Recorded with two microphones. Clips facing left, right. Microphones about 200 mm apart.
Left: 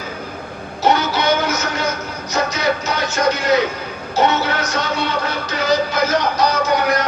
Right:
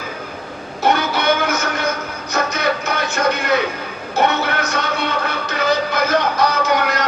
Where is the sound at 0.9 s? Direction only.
55° right (ahead or behind).